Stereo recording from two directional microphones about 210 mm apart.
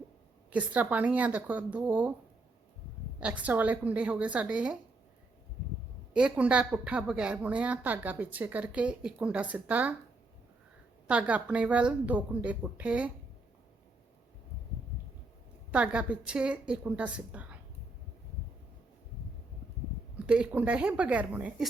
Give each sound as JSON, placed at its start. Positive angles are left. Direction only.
{"t": 0.5, "sound": "a woman's voice", "side_deg": -5}
{"t": 3.2, "sound": "a woman's voice", "side_deg": -5}
{"t": 6.1, "sound": "a woman's voice", "side_deg": -5}
{"t": 11.1, "sound": "a woman's voice", "side_deg": -5}
{"t": 15.7, "sound": "a woman's voice", "side_deg": -5}
{"t": 20.1, "sound": "a woman's voice", "side_deg": -5}